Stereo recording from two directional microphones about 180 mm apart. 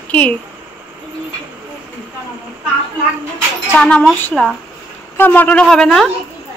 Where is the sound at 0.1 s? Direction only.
5° left (ahead or behind).